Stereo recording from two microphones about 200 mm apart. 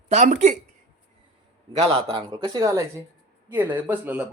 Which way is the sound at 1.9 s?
30° right (ahead or behind).